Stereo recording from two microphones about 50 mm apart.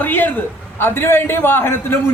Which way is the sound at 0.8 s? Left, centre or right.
Left.